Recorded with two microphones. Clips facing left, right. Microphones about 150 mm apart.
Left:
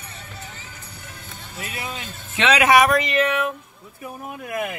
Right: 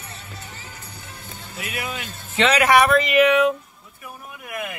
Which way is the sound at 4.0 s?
30° left (ahead or behind).